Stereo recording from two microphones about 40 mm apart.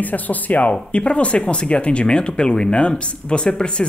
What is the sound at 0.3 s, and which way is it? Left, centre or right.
Speech, left.